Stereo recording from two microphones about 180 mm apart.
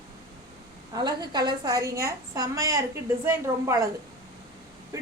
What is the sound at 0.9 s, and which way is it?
A woman's voice, 25° right (ahead or behind).